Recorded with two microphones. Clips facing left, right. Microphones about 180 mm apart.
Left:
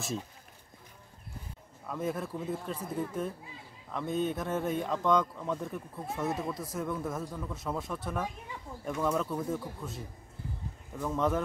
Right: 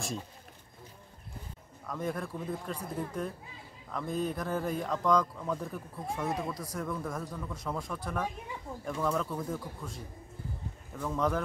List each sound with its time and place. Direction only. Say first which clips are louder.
1.9 s a man's voice: left 1 dB; 5° left (ahead or behind)